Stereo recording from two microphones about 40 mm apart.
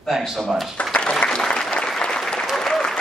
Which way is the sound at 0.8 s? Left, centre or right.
Left.